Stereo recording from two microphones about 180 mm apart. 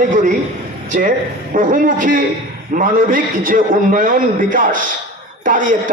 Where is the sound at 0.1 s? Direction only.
45° right (ahead or behind).